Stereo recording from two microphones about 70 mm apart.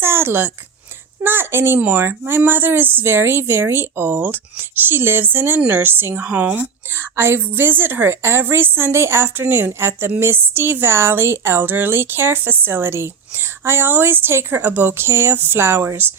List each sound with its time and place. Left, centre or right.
0.0 s a sound: right
1.2 s speech: right
6.3 s speech: right
6.9 s speech: right